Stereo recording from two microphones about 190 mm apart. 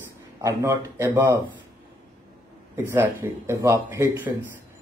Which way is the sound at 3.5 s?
15° right (ahead or behind).